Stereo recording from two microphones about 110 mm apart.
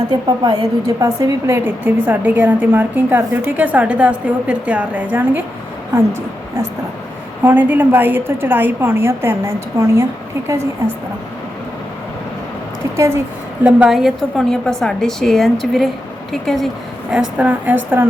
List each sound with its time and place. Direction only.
0.1 s a woman's voice: 40° right (ahead or behind); by 5.4 s 15° right (ahead or behind)
7.4 s a woman's voice: 15° right (ahead or behind)
13.7 s a woman's voice: 10° right (ahead or behind)
17.1 s a woman's voice: 10° right (ahead or behind)